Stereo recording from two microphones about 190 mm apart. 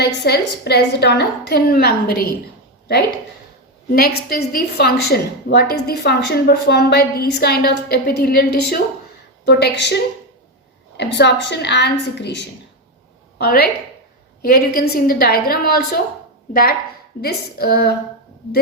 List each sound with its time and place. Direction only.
0.0 s a woman's voice: 60° left (ahead or behind)
3.9 s a woman's voice: 55° left (ahead or behind)
13.4 s a woman's voice: 55° left (ahead or behind)